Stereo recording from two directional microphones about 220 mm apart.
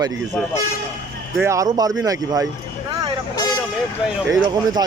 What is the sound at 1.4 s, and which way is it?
Speech, 15° right (ahead or behind).